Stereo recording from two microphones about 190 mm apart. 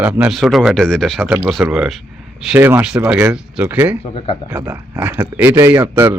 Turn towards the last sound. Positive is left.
turn(degrees=-10)  # may be behind; listen again after turning